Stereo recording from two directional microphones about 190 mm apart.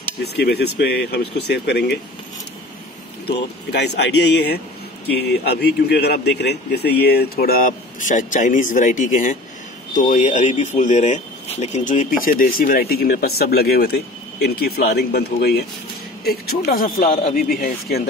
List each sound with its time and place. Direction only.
0.2 s speech: 60° left (ahead or behind)
3.3 s speech: 60° left (ahead or behind)